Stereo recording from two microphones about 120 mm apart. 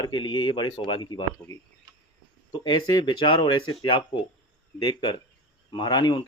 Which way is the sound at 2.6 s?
35° left (ahead or behind).